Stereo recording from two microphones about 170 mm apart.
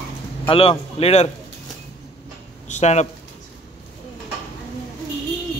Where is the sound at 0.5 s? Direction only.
35° left (ahead or behind).